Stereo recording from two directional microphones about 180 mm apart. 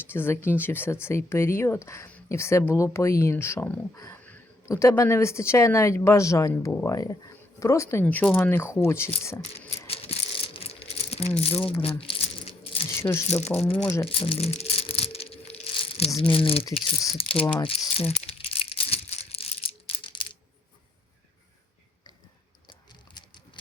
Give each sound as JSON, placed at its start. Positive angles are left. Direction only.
{"t": 0.1, "sound": "speech", "side_deg": 10}
{"t": 9.5, "sound": "rattle", "side_deg": 35}
{"t": 11.3, "sound": "crumpling", "side_deg": 35}
{"t": 13.0, "sound": "speech", "side_deg": 15}
{"t": 14.1, "sound": "rattle", "side_deg": 30}
{"t": 17.2, "sound": "speech", "side_deg": 30}
{"t": 17.6, "sound": "crumpling", "side_deg": 30}
{"t": 22.6, "sound": "a sound", "side_deg": 25}